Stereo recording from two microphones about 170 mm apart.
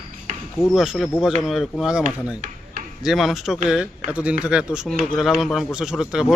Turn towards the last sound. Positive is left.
turn(degrees=-5)  # may be behind; listen again after turning